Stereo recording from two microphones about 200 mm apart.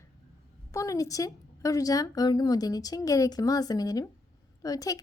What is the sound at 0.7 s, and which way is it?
A woman's voice, 15° left (ahead or behind).